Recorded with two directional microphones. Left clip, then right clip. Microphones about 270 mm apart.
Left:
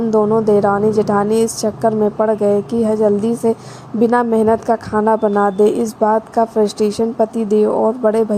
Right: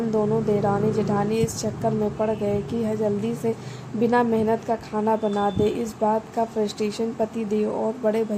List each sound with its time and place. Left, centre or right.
0.1 s speech: left